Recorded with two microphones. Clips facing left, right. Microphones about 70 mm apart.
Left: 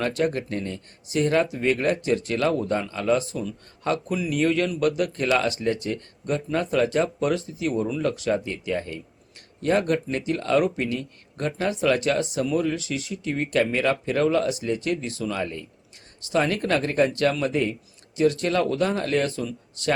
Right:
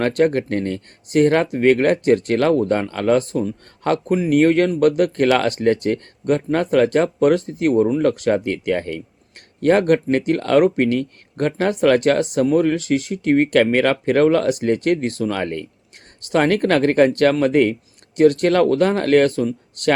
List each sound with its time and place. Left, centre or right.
0.0 s speech: right